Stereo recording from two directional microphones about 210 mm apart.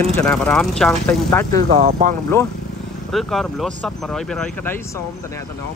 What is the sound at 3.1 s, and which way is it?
Speech, centre (ahead or behind).